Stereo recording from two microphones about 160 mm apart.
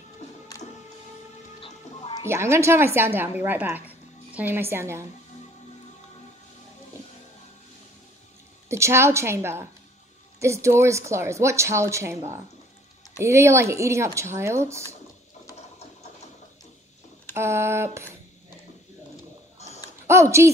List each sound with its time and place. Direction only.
1.6 s music: 35° left (ahead or behind)
2.2 s a woman's voice: 15° right (ahead or behind)
8.6 s a woman's voice: 15° right (ahead or behind)
13.2 s a woman's voice: 15° right (ahead or behind)
15.5 s ratchet: 45° left (ahead or behind)
17.3 s a woman's voice: 15° right (ahead or behind)
20.1 s speech: 15° right (ahead or behind)